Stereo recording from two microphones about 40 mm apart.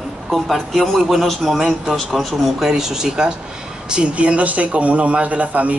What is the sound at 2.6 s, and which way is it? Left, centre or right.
Speech, centre.